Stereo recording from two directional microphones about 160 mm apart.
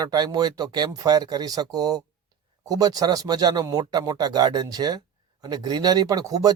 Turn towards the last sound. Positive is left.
turn(degrees=-25)  # may be behind; listen again after turning